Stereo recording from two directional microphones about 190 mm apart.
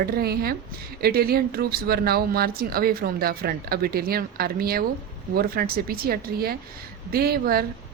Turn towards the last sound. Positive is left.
turn(degrees=-50)  # may be behind; listen again after turning